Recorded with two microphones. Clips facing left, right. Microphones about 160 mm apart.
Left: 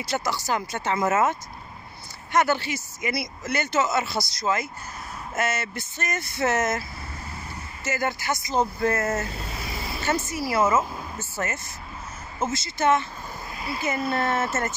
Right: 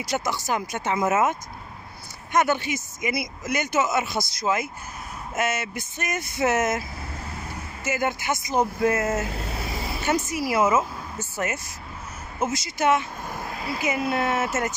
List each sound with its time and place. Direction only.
0.0 s speech: 20° right (ahead or behind)
2.3 s speech: 20° right (ahead or behind)
7.8 s speech: 20° right (ahead or behind)
13.3 s a sound: 85° right
13.8 s speech: 10° right (ahead or behind)